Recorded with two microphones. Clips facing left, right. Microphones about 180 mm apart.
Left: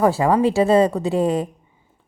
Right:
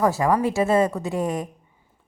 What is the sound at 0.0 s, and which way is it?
A woman's voice, 30° left (ahead or behind).